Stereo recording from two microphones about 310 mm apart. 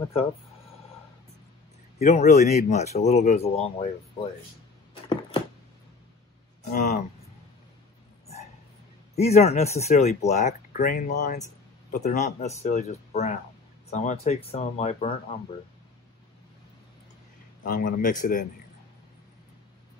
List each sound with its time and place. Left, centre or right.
2.0 s speech: left
6.7 s speech: left
9.1 s speech: left
17.6 s speech: left